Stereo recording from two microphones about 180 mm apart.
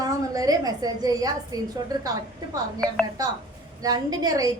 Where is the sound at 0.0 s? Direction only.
20° right (ahead or behind).